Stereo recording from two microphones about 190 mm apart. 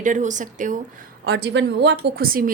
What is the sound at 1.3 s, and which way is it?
A woman's voice, 60° right (ahead or behind).